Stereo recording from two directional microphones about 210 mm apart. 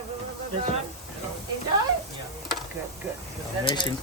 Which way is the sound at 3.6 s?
25° left (ahead or behind).